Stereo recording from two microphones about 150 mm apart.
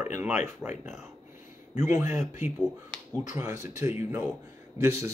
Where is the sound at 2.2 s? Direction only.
55° left (ahead or behind).